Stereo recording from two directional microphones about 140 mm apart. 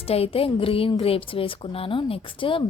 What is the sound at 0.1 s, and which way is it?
A woman's voice, 45° left (ahead or behind).